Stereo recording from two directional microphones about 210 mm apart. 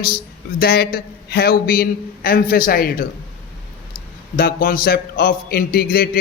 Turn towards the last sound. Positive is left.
turn(degrees=45)  # may be behind; listen again after turning